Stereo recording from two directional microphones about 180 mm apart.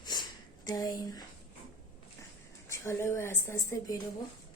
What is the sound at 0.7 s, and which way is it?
Speech, 20° left (ahead or behind).